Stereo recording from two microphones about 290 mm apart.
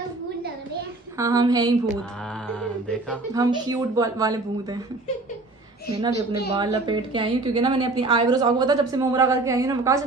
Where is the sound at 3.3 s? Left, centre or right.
Centre.